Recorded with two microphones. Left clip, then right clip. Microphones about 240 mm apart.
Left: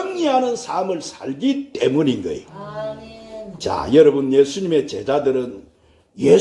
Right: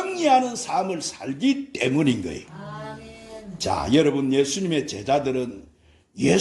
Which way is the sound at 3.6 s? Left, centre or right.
Right.